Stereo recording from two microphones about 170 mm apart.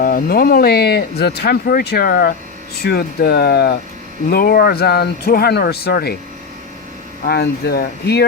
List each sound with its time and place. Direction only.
0.0 s speech: 60° left (ahead or behind)
7.3 s speech: 65° left (ahead or behind)